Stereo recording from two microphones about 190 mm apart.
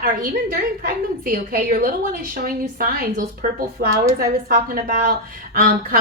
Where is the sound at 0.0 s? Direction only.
50° right (ahead or behind).